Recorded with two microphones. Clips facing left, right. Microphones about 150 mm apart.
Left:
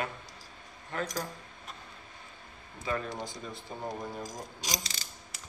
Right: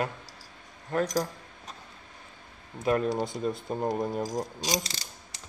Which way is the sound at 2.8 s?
70° right (ahead or behind).